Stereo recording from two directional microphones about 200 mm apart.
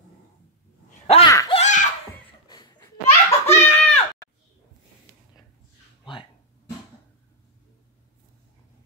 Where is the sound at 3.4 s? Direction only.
10° left (ahead or behind).